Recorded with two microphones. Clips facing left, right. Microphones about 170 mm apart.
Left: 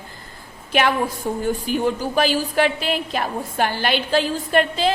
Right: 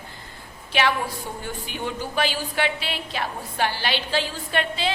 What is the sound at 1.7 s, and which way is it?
A woman's voice, 40° left (ahead or behind).